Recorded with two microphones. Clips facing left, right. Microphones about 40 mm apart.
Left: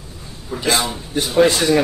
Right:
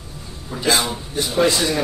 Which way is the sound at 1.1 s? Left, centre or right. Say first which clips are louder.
Left 4 dB; left.